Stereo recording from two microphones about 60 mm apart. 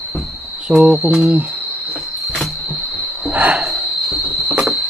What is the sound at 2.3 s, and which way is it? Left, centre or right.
Cricket, centre.